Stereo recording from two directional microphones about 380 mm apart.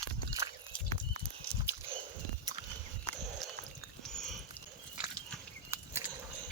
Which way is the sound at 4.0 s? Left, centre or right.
Centre.